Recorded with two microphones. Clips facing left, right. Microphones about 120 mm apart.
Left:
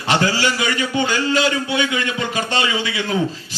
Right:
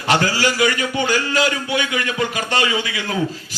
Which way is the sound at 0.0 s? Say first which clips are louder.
Even; 25° left (ahead or behind).